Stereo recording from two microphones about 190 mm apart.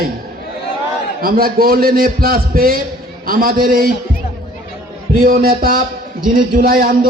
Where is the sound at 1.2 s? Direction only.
50° right (ahead or behind).